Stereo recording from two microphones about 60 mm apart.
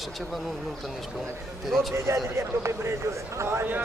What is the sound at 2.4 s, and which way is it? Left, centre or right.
Speech, right.